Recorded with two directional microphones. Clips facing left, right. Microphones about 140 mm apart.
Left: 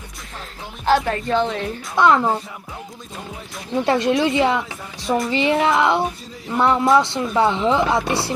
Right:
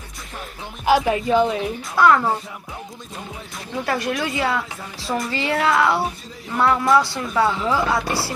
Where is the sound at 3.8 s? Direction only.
25° left (ahead or behind).